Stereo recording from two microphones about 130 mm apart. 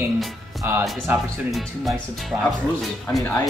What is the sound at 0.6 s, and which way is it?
Speech, 20° right (ahead or behind).